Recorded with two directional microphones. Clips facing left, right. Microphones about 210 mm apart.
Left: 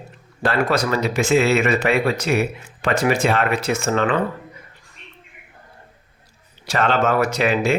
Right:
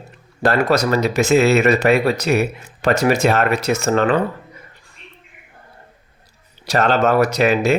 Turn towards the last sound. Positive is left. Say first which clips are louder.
# right 3 dB
turn(degrees=-40)  # may be behind; listen again after turning